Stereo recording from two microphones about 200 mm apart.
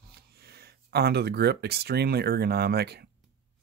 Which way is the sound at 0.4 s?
50° right (ahead or behind).